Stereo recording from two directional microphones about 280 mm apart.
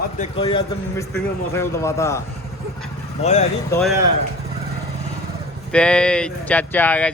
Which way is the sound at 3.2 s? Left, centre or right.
Left.